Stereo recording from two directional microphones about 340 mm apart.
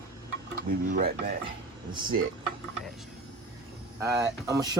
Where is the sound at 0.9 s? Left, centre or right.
Right.